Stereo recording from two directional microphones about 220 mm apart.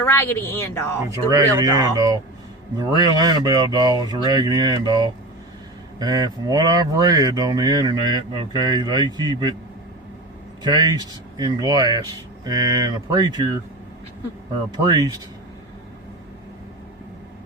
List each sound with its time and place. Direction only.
0.0 s speech: 10° left (ahead or behind)
1.1 s speech: 15° right (ahead or behind)
10.6 s speech: 20° right (ahead or behind)
14.8 s speech: 20° right (ahead or behind)